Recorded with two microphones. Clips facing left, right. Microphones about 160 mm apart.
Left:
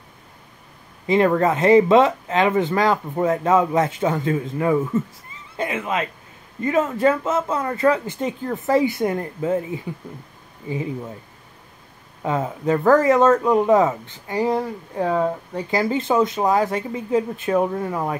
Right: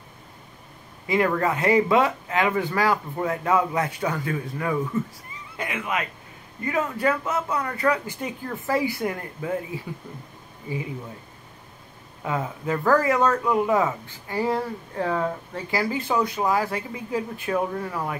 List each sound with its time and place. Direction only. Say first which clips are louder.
1.0 s speech: left 5 dB; 25° left (ahead or behind)
12.2 s speech: left 5 dB; 25° left (ahead or behind)